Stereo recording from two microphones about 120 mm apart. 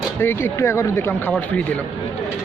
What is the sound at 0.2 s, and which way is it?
Speech, 20° left (ahead or behind).